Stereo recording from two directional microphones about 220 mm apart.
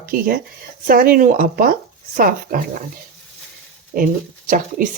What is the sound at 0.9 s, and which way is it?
Stir, 40° right (ahead or behind).